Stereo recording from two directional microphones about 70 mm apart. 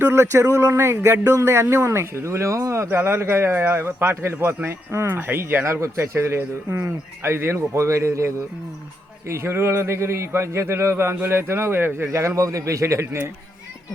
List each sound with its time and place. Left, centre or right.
0.1 s a man's voice: right
5.8 s a man's voice: right